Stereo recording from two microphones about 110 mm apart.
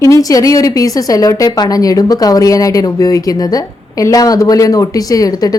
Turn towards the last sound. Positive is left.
turn(degrees=35)  # may be behind; listen again after turning